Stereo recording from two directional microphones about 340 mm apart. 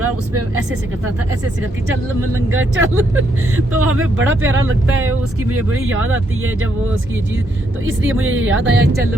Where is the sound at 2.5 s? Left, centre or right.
Right.